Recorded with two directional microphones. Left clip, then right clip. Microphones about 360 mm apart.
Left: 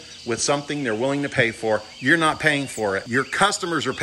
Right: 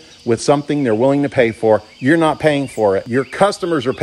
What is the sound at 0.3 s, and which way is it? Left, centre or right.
Speech, centre.